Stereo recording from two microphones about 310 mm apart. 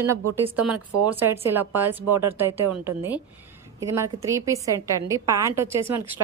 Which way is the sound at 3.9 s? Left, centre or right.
Centre.